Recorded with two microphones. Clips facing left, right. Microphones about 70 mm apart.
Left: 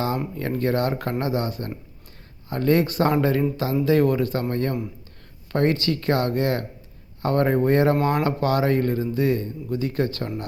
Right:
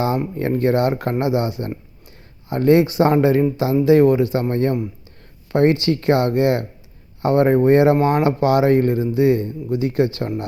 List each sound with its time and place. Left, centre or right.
0.3 s speech: right
3.1 s speech: right